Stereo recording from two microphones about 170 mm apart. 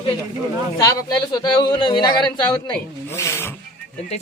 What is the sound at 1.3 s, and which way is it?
Speech, 25° left (ahead or behind).